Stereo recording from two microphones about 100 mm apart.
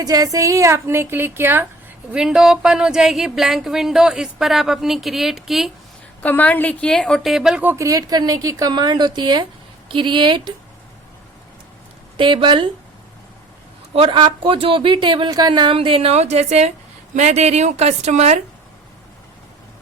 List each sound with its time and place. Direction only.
0.0 s a woman's voice: 35° right (ahead or behind); by 1.6 s 20° right (ahead or behind)
2.1 s speech: 5° right (ahead or behind)
6.2 s a woman's voice: 15° left (ahead or behind); by 7.6 s 5° right (ahead or behind)
7.6 s a woman's voice: 20° right (ahead or behind)
7.9 s a woman's voice: 40° right (ahead or behind)
8.7 s speech: 45° right (ahead or behind)
12.1 s speech: 55° right (ahead or behind)
13.9 s speech: 65° right (ahead or behind)
14.2 s speech: 45° right (ahead or behind)
14.5 s speech: 60° right (ahead or behind)
15.3 s a woman's voice: 45° right (ahead or behind); by 18.3 s 90° right